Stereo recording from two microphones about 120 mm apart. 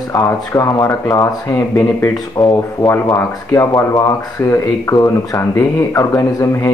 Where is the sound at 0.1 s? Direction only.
25° left (ahead or behind).